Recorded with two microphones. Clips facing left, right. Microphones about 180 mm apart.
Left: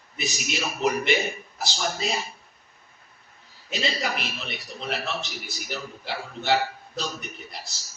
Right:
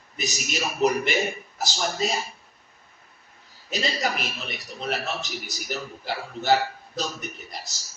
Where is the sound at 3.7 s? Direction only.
40° right (ahead or behind).